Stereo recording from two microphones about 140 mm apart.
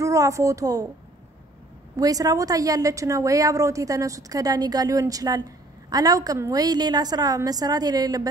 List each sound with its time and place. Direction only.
0.0 s a woman's voice: 25° right (ahead or behind)
2.0 s a woman's voice: 25° right (ahead or behind)